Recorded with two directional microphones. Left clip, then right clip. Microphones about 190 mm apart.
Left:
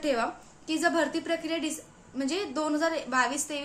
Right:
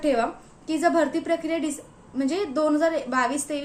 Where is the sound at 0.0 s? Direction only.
5° left (ahead or behind).